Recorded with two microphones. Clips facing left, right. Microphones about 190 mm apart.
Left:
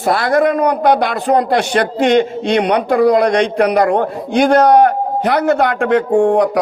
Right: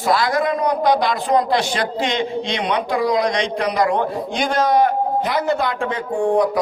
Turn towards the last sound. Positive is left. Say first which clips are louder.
# left 6 dB
turn(degrees=65)  # may be behind; listen again after turning